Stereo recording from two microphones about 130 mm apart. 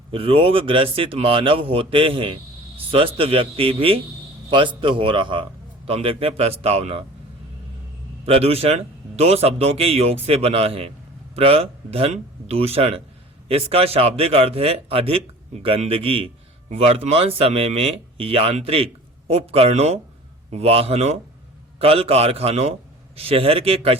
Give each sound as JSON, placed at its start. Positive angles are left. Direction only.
{"t": 0.1, "sound": "speech", "side_deg": -45}
{"t": 8.3, "sound": "speech", "side_deg": -50}